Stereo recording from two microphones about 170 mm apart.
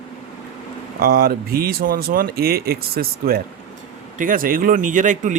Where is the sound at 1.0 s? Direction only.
60° right (ahead or behind).